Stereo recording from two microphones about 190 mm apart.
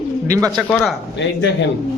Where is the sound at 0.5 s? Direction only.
Centre (ahead or behind).